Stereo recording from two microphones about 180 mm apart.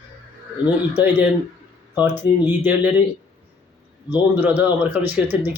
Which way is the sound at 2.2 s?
10° right (ahead or behind).